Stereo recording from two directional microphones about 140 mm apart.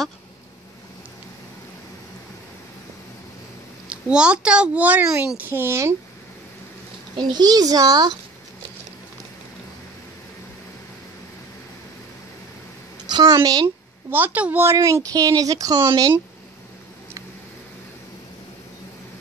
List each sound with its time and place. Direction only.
3.9 s a child's voice: 10° right (ahead or behind)
7.2 s a woman's voice: 30° right (ahead or behind)
13.1 s a woman's voice: 30° right (ahead or behind)
14.1 s a woman's voice: 10° right (ahead or behind); by 16.2 s 30° right (ahead or behind)